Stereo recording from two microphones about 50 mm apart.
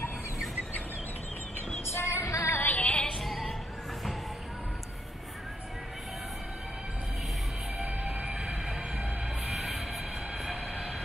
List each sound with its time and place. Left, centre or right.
1.9 s music: left
2.6 s music: left
3.2 s music: centre
8.4 s train: centre